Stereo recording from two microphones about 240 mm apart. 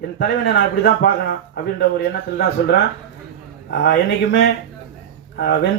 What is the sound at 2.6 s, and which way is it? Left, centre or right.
Speech, left.